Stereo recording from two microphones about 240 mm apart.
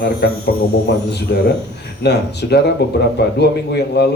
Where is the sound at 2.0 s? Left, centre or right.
Left.